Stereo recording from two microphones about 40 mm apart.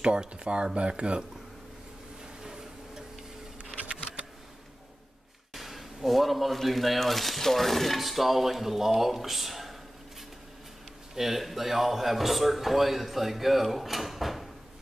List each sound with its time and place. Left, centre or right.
0.0 s speech: right
3.6 s a sound: right
5.5 s speech: centre
11.1 s speech: centre